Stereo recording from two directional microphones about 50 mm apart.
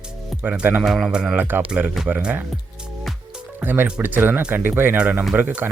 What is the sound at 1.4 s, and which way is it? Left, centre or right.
Speech, right.